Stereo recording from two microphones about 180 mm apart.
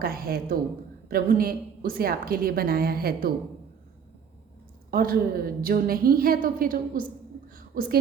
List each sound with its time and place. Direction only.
0.0 s a woman's voice: 55° right (ahead or behind)
4.9 s a woman's voice: 55° right (ahead or behind)
7.5 s a sound: 50° right (ahead or behind)